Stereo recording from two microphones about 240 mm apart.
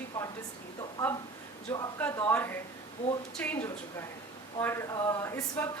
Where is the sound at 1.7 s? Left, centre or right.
Centre.